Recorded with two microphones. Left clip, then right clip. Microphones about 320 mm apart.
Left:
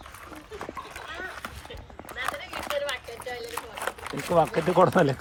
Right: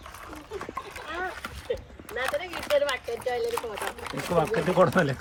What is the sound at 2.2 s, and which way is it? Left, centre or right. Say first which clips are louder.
Clip-clop: right 2 dB; centre.